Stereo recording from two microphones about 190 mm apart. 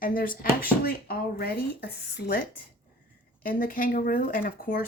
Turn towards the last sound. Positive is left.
turn(degrees=50)  # may be behind; listen again after turning